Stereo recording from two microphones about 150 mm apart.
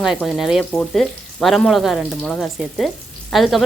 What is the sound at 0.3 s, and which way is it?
Frying, centre (ahead or behind).